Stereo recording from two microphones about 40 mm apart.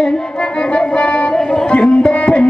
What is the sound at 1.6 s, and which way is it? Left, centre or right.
Tabla, left.